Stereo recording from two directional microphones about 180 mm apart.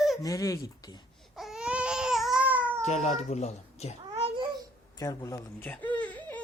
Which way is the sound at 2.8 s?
40° left (ahead or behind).